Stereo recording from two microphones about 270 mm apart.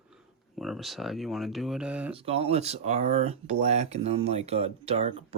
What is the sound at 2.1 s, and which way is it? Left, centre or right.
Speech, right.